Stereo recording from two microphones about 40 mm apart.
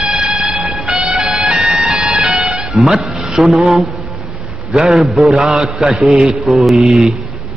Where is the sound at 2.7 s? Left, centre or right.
Centre.